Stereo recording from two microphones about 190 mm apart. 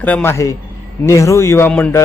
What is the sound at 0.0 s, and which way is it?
A man's voice, 10° left (ahead or behind).